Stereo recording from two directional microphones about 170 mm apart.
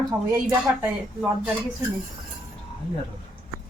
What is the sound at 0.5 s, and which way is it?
A woman's voice, 10° right (ahead or behind).